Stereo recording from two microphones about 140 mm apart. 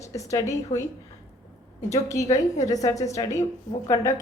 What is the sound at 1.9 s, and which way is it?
A woman's voice, 20° left (ahead or behind).